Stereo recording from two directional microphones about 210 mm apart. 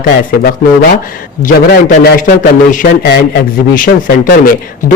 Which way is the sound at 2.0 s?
50° left (ahead or behind).